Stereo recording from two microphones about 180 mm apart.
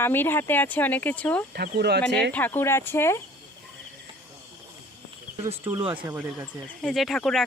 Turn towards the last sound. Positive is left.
turn(degrees=0)  # may be behind; listen again after turning